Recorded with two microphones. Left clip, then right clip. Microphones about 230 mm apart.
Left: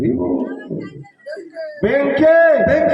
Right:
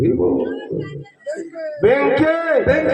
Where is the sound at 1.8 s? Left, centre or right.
Left.